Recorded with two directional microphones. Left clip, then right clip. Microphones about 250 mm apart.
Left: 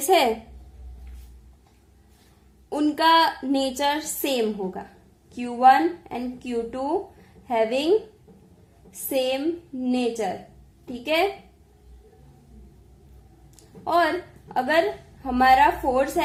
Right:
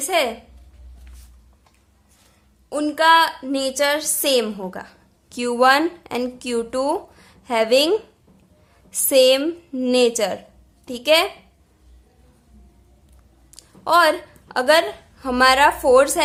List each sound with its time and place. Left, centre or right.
0.0 s a woman's voice: centre
2.6 s a woman's voice: centre
9.0 s speech: right
13.6 s a woman's voice: right